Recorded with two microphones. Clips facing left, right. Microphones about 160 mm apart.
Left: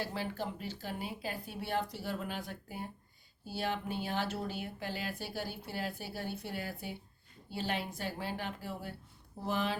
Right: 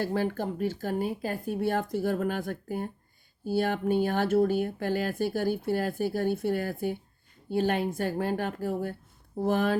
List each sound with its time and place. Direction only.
0.0 s speech: 50° right (ahead or behind)